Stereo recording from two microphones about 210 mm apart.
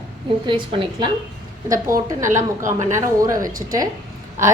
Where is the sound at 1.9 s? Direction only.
40° right (ahead or behind).